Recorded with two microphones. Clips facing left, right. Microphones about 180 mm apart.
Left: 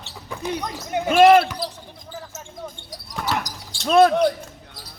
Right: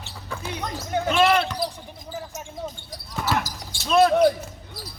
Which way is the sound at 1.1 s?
45° left (ahead or behind).